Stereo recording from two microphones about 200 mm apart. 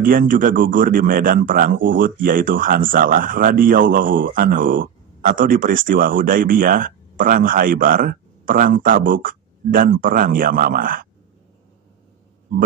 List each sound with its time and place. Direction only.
0.0 s a man's voice: 45° right (ahead or behind)